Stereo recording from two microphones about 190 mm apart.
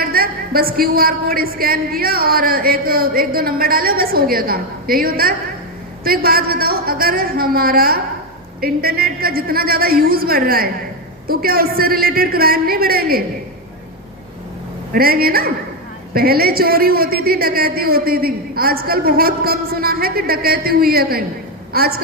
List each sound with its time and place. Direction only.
0.0 s a woman's voice: 50° right (ahead or behind)
14.9 s a woman's voice: 50° right (ahead or behind)